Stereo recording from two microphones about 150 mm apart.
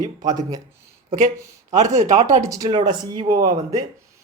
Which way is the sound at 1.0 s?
55° right (ahead or behind).